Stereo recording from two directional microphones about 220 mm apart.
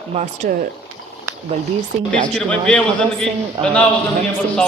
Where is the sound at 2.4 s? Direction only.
5° left (ahead or behind).